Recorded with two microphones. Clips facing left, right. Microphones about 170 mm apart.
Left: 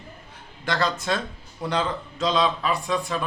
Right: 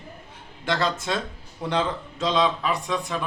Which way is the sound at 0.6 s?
25° right (ahead or behind).